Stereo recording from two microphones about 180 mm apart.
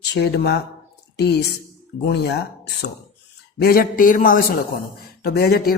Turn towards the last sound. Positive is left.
turn(degrees=60)  # may be behind; listen again after turning